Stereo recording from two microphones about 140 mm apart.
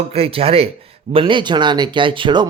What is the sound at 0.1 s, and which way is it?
Speech, 45° right (ahead or behind).